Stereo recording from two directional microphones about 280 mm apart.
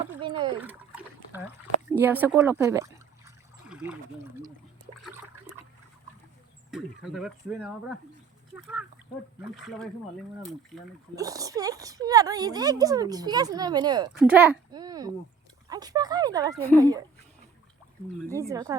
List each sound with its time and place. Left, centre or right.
0.0 s splash: centre
0.6 s a sound: centre
4.9 s water: centre
6.7 s speech: centre
11.1 s speech: centre
14.1 s speech: centre
18.3 s speech: centre